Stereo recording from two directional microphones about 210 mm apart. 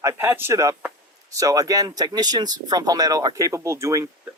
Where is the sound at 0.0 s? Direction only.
10° right (ahead or behind).